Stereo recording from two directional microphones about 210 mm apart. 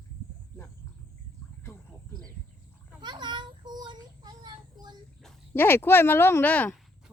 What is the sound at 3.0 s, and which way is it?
Child singing, 20° right (ahead or behind).